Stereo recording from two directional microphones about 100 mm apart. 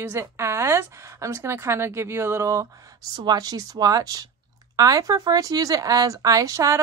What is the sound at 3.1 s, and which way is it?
Speech, 40° right (ahead or behind).